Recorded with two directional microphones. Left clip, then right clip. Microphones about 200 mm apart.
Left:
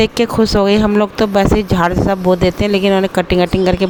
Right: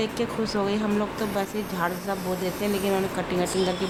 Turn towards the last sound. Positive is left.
turn(degrees=40)  # may be behind; listen again after turning